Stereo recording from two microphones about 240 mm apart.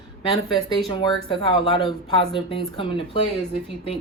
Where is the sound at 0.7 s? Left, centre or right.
Centre.